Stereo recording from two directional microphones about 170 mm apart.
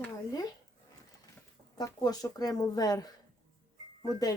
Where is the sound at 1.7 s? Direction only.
25° left (ahead or behind).